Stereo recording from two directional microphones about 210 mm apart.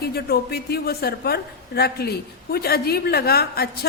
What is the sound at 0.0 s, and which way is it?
A woman's voice, 50° left (ahead or behind).